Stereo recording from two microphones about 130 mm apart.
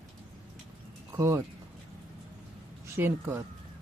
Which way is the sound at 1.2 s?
20° right (ahead or behind).